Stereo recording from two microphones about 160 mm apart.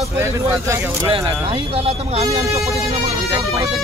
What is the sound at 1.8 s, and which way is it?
Speech, 40° right (ahead or behind).